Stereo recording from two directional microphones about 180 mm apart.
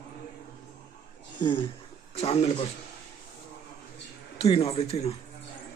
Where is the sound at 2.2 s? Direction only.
35° left (ahead or behind).